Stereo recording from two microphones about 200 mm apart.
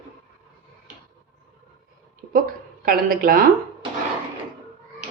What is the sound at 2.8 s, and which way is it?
Speech, 45° right (ahead or behind).